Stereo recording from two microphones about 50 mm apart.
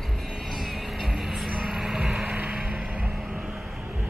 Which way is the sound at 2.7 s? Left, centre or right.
Centre.